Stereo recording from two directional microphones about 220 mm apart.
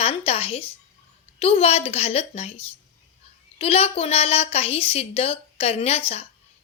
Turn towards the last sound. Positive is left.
turn(degrees=30)  # may be behind; listen again after turning